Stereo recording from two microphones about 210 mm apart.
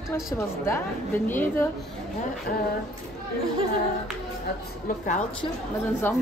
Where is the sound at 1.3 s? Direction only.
10° left (ahead or behind).